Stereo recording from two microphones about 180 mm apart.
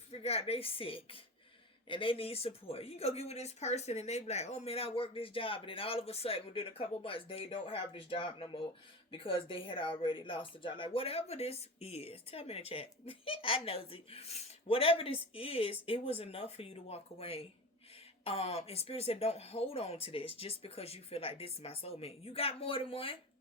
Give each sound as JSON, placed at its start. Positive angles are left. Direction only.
{"t": 0.1, "sound": "a woman's voice", "side_deg": 35}